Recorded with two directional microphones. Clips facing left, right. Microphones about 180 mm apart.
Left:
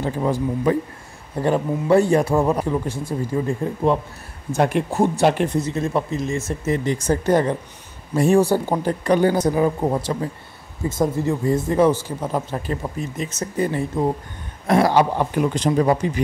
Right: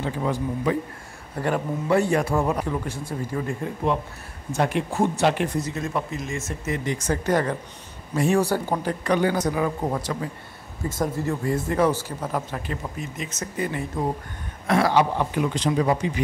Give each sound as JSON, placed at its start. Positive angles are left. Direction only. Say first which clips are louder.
{"t": 0.0, "sound": "a man's voice", "louder": "left 4 dB", "side_deg": 35}
{"t": 4.6, "sound": "a man's voice", "louder": "left 4 dB", "side_deg": 40}